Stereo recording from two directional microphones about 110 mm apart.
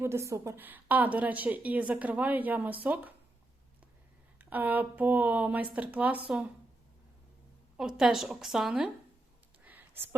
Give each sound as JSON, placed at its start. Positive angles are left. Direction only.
{"t": 0.0, "sound": "a woman's voice", "side_deg": -25}
{"t": 4.4, "sound": "a woman's voice", "side_deg": -15}
{"t": 7.8, "sound": "a woman's voice", "side_deg": -5}
{"t": 9.6, "sound": "a sound", "side_deg": -20}